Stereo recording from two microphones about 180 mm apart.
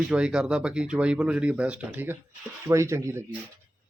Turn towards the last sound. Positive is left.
turn(degrees=-15)  # may be behind; listen again after turning